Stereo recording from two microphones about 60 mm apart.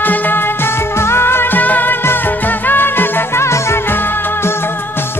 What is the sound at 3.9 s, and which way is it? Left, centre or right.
Music of bollywood, left.